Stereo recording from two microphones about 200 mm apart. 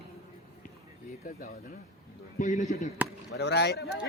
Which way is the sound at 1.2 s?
45° left (ahead or behind).